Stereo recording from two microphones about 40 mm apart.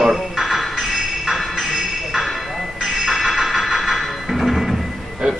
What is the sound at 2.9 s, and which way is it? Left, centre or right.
Music, centre.